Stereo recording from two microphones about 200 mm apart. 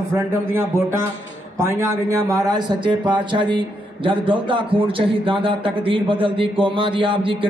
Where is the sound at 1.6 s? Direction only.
15° right (ahead or behind).